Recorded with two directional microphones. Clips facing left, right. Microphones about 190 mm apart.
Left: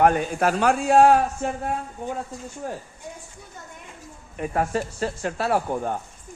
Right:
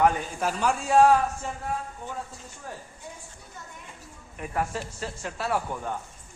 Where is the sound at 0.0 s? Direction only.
65° left (ahead or behind).